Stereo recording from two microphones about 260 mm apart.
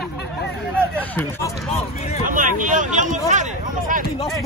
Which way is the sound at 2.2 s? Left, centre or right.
Right.